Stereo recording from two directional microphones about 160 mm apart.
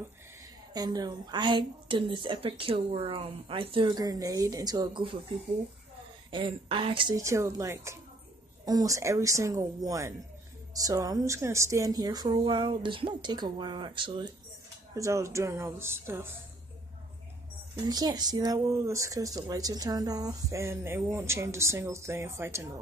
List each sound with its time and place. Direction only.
0.7 s speech: 25° right (ahead or behind)
6.3 s speech: 30° right (ahead or behind)
7.2 s speech: 20° right (ahead or behind)
15.0 s speech: 20° right (ahead or behind)
17.7 s speech: 25° right (ahead or behind)